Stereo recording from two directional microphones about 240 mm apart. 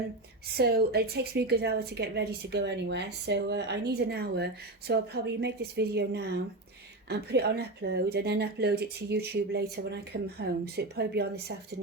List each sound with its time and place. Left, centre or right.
0.5 s speech: right